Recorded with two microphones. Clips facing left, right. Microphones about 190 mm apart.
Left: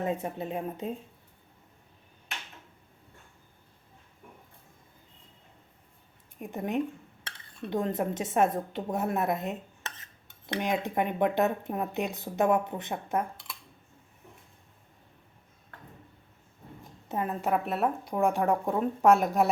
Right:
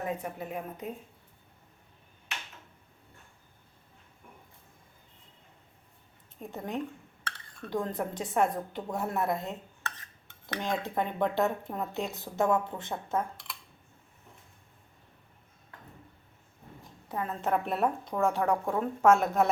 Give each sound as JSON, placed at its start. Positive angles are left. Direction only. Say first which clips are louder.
{"t": 0.0, "sound": "speech", "louder": "left 4 dB", "side_deg": 25}
{"t": 6.4, "sound": "speech", "louder": "left 5 dB", "side_deg": 15}
{"t": 17.1, "sound": "a woman's voice", "louder": "left 3 dB", "side_deg": 20}
{"t": 17.4, "sound": "speech", "louder": "right 1 dB", "side_deg": 5}